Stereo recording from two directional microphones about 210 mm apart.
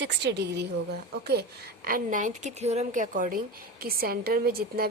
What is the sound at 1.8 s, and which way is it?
A woman's voice, 40° right (ahead or behind).